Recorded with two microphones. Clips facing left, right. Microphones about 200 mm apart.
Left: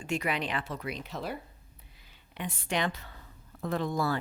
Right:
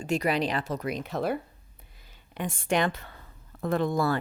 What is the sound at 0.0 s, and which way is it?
A woman's voice, 40° right (ahead or behind).